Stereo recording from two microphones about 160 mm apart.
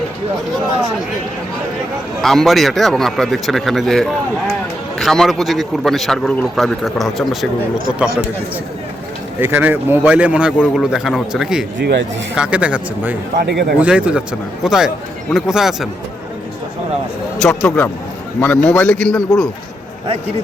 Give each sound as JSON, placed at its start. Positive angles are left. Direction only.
{"t": 2.2, "sound": "speech", "side_deg": 0}
{"t": 9.4, "sound": "a man's voice", "side_deg": -10}
{"t": 11.8, "sound": "a man's voice", "side_deg": -90}
{"t": 12.4, "sound": "a man's voice", "side_deg": -5}
{"t": 13.3, "sound": "a man's voice", "side_deg": -90}
{"t": 13.7, "sound": "speech", "side_deg": -10}
{"t": 17.3, "sound": "speech", "side_deg": 5}
{"t": 17.7, "sound": "a man's voice", "side_deg": 15}